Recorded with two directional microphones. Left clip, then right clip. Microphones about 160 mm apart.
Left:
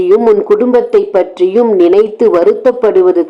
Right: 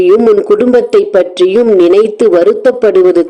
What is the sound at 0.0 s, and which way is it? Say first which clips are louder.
A man's voice: right 2 dB; 15° right (ahead or behind).